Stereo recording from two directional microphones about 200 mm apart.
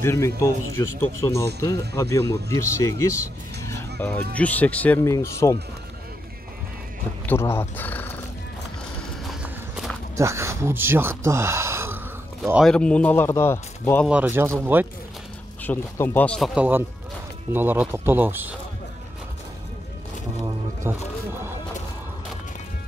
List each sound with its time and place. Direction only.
0.0 s speech: 15° left (ahead or behind)
7.2 s speech: 10° left (ahead or behind)
9.3 s walk: centre (ahead or behind)
10.1 s speech: 15° right (ahead or behind)
12.4 s speech: centre (ahead or behind)
14.0 s speech: 10° right (ahead or behind)
15.6 s speech: 10° left (ahead or behind); by 18.6 s 10° right (ahead or behind)
20.9 s speech: 10° right (ahead or behind)
21.3 s music: 10° right (ahead or behind)